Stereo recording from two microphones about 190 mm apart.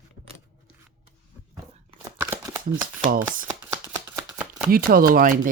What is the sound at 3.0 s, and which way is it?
Speech, 45° right (ahead or behind).